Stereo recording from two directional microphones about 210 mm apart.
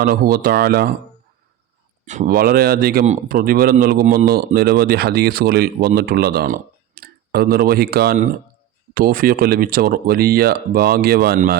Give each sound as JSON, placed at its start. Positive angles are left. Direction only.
{"t": 0.0, "sound": "a man's voice", "side_deg": -45}
{"t": 2.0, "sound": "a man's voice", "side_deg": -40}